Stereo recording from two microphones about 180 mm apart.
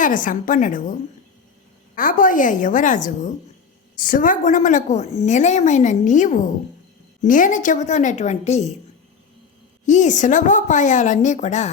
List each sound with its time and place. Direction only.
0.0 s a woman's voice: 45° left (ahead or behind)
2.0 s a woman's voice: 50° left (ahead or behind)
9.8 s a woman's voice: 45° left (ahead or behind)